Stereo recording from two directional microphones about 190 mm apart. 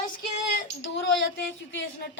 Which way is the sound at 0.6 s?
70° left (ahead or behind).